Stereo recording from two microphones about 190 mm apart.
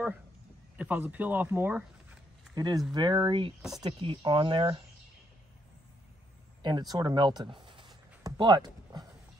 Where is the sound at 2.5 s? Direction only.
20° right (ahead or behind).